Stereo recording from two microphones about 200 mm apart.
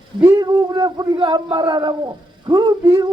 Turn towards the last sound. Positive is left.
turn(degrees=-20)  # may be behind; listen again after turning